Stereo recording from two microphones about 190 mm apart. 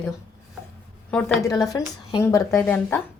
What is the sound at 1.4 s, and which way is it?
Speech, 15° left (ahead or behind).